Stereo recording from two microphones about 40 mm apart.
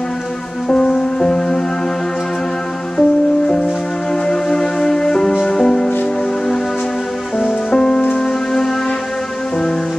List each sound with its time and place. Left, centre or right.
0.7 s music: left
3.0 s music: left
7.7 s music: left